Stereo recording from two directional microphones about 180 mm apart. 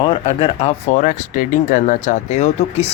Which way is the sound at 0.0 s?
30° left (ahead or behind).